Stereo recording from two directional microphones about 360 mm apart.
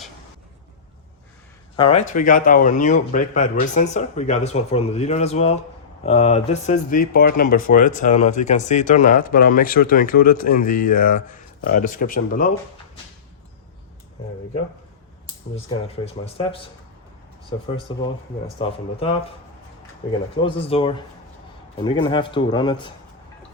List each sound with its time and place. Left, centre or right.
1.7 s speech: centre
16.2 s a man's voice: centre
17.7 s a man's voice: centre
20.4 s a man's voice: centre